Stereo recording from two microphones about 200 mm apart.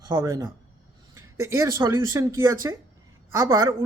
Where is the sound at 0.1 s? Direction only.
15° right (ahead or behind).